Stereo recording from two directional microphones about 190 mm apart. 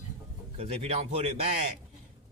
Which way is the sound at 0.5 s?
35° right (ahead or behind).